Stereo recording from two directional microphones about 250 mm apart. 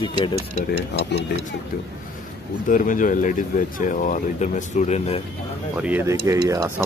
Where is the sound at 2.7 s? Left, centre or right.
Left.